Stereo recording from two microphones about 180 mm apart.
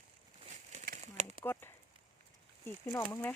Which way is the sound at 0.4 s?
40° right (ahead or behind).